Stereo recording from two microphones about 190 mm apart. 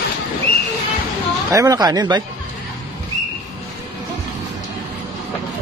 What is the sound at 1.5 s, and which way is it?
Speech, 15° right (ahead or behind).